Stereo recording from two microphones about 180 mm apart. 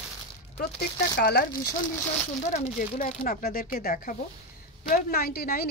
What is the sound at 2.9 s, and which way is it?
A woman's voice, 50° left (ahead or behind).